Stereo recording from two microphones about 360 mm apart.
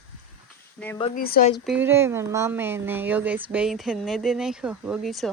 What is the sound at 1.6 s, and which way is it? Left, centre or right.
Speech, centre.